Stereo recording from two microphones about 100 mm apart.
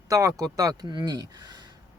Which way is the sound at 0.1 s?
35° right (ahead or behind).